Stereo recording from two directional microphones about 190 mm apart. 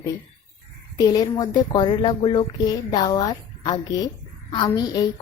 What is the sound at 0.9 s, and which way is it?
A woman's voice, 20° left (ahead or behind).